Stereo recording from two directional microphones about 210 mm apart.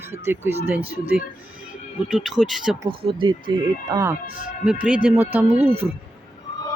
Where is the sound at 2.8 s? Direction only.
25° right (ahead or behind).